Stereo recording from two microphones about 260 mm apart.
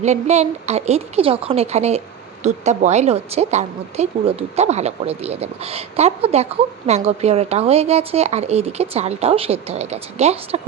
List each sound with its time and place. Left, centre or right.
0.0 s a woman's voice: right